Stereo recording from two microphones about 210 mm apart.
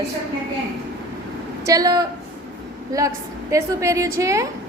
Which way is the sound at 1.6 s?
15° right (ahead or behind).